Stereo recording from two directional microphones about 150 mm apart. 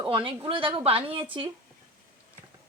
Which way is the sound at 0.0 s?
35° right (ahead or behind).